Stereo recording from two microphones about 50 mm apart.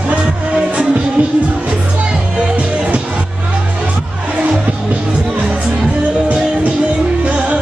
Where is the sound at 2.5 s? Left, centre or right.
Right.